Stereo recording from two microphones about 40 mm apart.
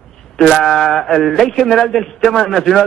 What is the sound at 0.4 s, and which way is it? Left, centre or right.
A man's voice, centre.